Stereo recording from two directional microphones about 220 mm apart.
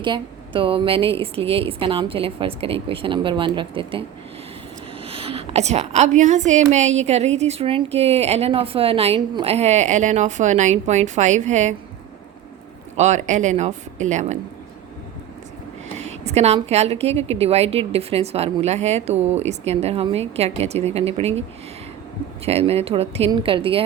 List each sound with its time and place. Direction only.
0.0 s a woman's voice: 20° right (ahead or behind)
5.0 s a woman's voice: 25° right (ahead or behind)
13.0 s speech: 30° right (ahead or behind)
16.0 s a woman's voice: 30° right (ahead or behind)
22.4 s a woman's voice: 25° right (ahead or behind)